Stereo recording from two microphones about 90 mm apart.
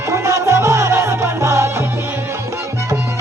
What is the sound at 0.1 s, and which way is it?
Music, 30° right (ahead or behind).